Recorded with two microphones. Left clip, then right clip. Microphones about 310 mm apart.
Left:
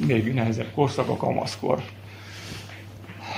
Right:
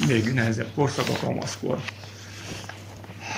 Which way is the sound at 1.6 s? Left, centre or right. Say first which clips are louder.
Left 4 dB; left.